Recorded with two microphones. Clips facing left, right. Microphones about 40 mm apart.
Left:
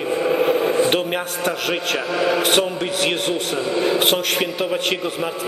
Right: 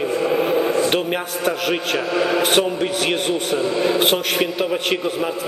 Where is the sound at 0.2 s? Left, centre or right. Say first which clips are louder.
Left 1 dB; centre.